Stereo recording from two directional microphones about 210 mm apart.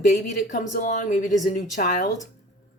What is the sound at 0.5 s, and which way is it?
Speech, 40° left (ahead or behind).